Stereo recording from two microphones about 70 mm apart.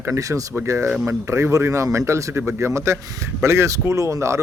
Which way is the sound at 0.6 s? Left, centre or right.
Right.